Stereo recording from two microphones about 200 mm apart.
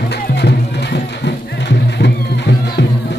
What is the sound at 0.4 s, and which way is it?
Music, 55° left (ahead or behind).